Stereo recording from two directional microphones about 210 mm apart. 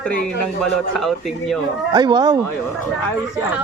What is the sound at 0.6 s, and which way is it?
Speech, centre (ahead or behind).